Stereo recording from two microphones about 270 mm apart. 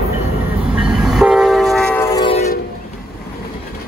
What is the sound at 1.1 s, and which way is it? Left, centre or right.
Train, centre.